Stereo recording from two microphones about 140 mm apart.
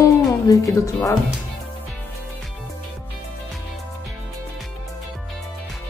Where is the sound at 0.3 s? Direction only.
25° left (ahead or behind).